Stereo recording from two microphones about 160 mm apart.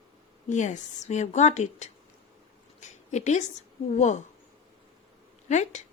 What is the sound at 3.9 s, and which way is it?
Speech, 50° left (ahead or behind).